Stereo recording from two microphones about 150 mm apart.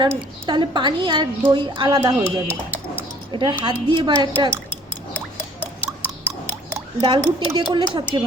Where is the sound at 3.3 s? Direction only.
30° right (ahead or behind).